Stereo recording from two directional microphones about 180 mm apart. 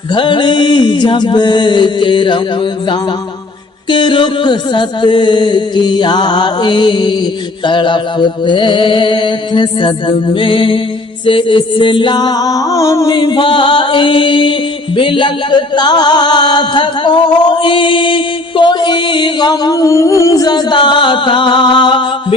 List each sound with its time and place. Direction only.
0.1 s music: 25° left (ahead or behind)